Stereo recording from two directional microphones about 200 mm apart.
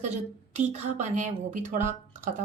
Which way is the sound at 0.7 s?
35° right (ahead or behind).